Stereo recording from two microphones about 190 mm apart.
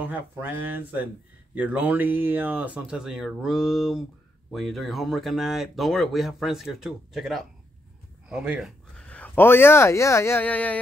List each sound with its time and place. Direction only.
0.0 s speech: 10° right (ahead or behind); by 10.8 s 10° left (ahead or behind)